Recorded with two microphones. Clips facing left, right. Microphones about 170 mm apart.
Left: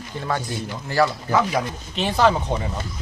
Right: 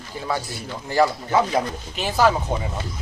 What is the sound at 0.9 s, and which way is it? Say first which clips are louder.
Speech: right 1 dB; 20° right (ahead or behind).